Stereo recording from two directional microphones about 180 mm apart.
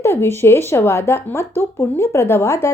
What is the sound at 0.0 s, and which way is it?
A woman's voice, 15° left (ahead or behind).